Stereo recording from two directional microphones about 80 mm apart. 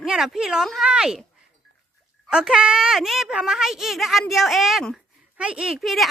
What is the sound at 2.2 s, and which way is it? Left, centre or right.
A woman's voice, centre.